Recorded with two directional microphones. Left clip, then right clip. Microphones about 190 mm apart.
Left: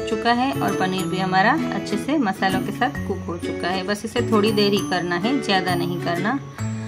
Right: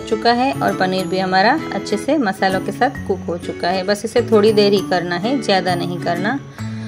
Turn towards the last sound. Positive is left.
turn(degrees=-15)  # may be behind; listen again after turning